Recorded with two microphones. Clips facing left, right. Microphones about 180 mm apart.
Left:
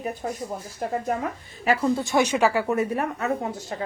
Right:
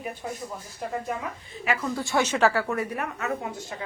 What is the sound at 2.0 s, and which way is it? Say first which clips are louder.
A woman's voice: left 2 dB; 15° left (ahead or behind).